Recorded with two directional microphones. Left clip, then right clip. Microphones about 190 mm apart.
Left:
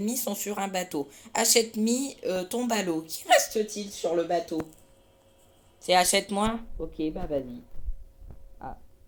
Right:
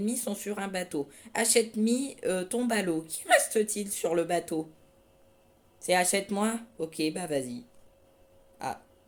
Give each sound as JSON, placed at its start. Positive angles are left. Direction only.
{"t": 0.0, "sound": "speech", "side_deg": -10}
{"t": 4.0, "sound": "speech", "side_deg": -30}
{"t": 5.8, "sound": "speech", "side_deg": -10}